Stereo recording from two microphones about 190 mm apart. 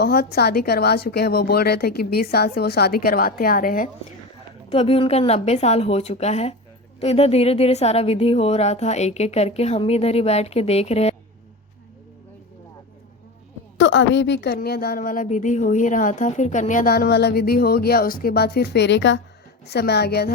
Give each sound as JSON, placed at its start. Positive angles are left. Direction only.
{"t": 0.0, "sound": "a woman's voice", "side_deg": 55}
{"t": 4.7, "sound": "speech", "side_deg": 30}
{"t": 13.7, "sound": "a woman's voice", "side_deg": 70}